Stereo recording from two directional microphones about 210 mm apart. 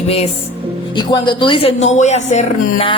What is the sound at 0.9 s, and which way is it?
A woman's voice, 20° left (ahead or behind).